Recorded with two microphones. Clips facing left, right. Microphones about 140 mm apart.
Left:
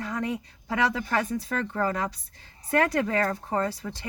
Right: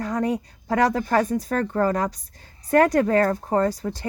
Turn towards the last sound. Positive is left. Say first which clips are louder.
# right 6 dB
turn(degrees=-40)  # may be behind; listen again after turning